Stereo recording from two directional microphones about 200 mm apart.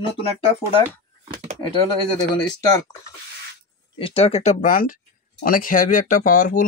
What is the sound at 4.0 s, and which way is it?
Speech, 30° left (ahead or behind).